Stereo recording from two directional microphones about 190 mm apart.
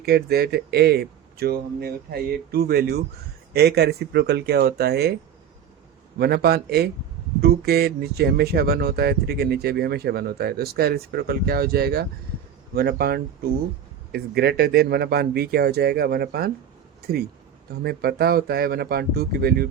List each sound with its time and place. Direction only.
0.0 s speech: 55° right (ahead or behind)
6.1 s speech: 55° right (ahead or behind)